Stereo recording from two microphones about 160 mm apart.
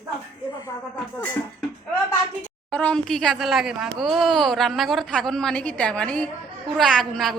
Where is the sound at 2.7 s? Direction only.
10° left (ahead or behind).